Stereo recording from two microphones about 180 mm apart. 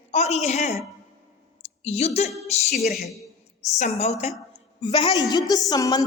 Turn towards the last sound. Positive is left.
turn(degrees=20)  # may be behind; listen again after turning